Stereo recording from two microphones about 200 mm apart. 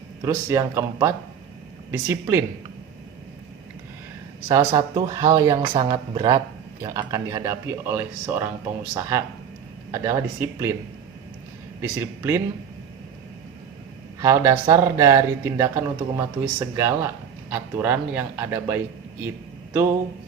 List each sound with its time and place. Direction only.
0.3 s speech: 15° right (ahead or behind)
4.4 s speech: 20° right (ahead or behind)
11.8 s speech: 10° right (ahead or behind)
14.2 s speech: 15° right (ahead or behind)